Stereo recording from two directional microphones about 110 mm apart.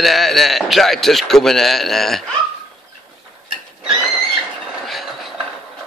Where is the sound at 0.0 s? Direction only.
Centre (ahead or behind).